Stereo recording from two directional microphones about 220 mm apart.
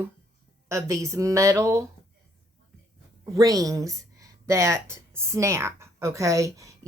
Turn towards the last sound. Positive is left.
turn(degrees=-15)  # may be behind; listen again after turning